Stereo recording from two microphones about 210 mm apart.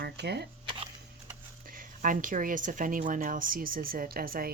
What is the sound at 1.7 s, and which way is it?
A woman's voice, 40° right (ahead or behind).